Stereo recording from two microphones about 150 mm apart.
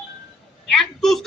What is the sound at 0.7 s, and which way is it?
Speech, centre (ahead or behind).